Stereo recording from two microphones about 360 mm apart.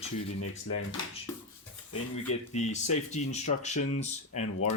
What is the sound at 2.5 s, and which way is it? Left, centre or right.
Speech, centre.